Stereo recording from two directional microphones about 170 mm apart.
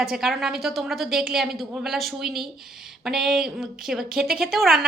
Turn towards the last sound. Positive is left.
turn(degrees=0)  # may be behind; listen again after turning